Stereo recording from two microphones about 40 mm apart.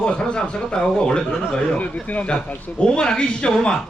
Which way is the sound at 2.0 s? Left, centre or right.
Left.